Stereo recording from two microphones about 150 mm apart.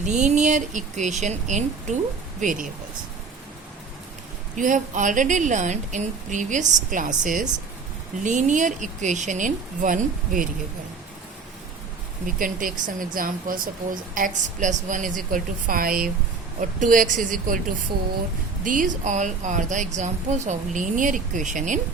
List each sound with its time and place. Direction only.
0.0 s speech: 55° right (ahead or behind)
4.5 s speech: 60° right (ahead or behind)
12.2 s speech: 65° right (ahead or behind)
16.6 s speech: 60° right (ahead or behind)
18.6 s speech: 60° right (ahead or behind)